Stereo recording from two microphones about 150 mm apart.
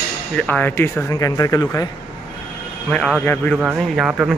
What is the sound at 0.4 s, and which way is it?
Speech, 10° left (ahead or behind).